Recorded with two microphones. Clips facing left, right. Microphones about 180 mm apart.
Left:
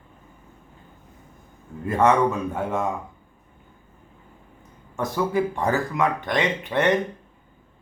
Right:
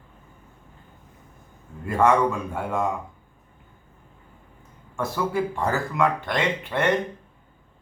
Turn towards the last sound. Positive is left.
turn(degrees=15)  # may be behind; listen again after turning